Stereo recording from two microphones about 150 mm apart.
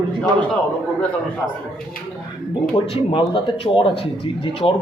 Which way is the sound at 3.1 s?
35° left (ahead or behind).